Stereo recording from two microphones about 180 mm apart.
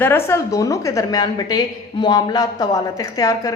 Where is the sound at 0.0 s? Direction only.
15° left (ahead or behind).